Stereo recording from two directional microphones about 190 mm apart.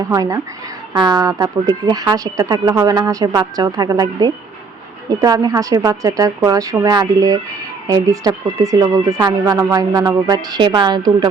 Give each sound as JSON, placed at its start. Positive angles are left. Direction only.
{"t": 0.1, "sound": "a woman's voice", "side_deg": -15}